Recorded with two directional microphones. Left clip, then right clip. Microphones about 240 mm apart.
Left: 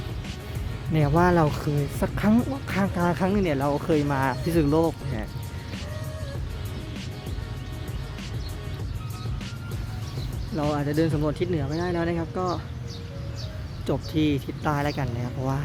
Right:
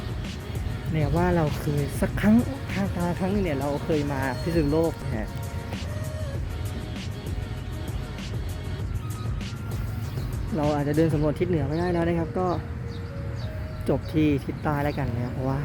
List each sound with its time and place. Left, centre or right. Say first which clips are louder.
0.9 s speech: left 4 dB; left
2.6 s speech: left 4 dB; left
10.6 s speech: right 1 dB; centre
13.8 s speech: right 1 dB; centre